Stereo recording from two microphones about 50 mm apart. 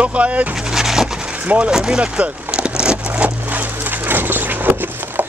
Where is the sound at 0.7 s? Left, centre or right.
Centre.